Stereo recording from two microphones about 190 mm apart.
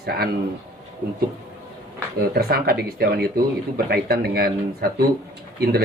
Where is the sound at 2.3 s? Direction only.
55° right (ahead or behind).